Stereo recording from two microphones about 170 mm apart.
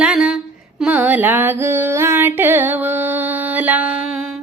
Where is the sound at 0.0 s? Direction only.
5° right (ahead or behind).